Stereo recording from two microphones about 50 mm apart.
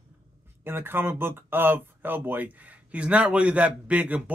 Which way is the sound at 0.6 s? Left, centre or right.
Right.